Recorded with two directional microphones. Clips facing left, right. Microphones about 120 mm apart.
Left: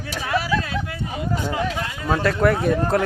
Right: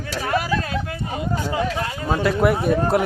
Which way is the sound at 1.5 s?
40° right (ahead or behind).